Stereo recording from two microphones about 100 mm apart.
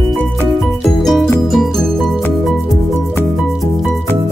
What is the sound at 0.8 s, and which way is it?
Music, 5° left (ahead or behind).